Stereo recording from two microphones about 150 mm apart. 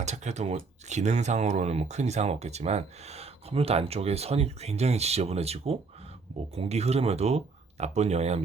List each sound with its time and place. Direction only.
0.0 s speech: 50° right (ahead or behind)